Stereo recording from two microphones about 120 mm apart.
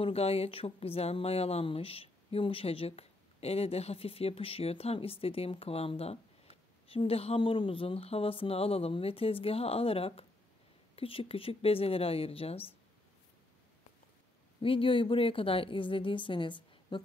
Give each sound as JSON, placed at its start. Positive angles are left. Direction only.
{"t": 0.0, "sound": "speech", "side_deg": 60}
{"t": 14.6, "sound": "speech", "side_deg": 45}